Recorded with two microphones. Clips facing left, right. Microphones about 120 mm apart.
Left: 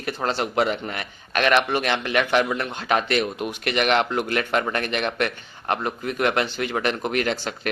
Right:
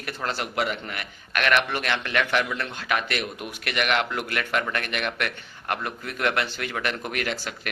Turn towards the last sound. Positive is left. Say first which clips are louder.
# left 5 dB
turn(degrees=25)  # may be behind; listen again after turning